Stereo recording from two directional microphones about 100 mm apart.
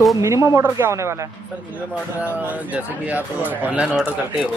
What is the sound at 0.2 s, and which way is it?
Speech, 30° right (ahead or behind).